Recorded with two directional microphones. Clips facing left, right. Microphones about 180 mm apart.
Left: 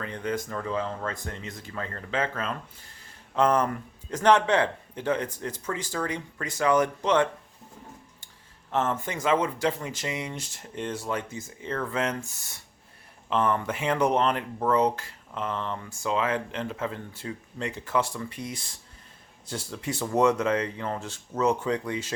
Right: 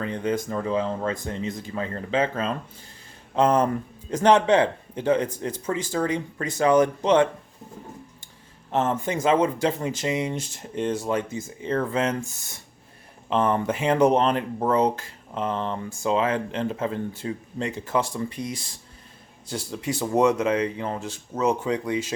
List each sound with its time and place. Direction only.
0.0 s speech: 20° right (ahead or behind)
8.7 s speech: 20° right (ahead or behind)
13.3 s speech: 25° right (ahead or behind)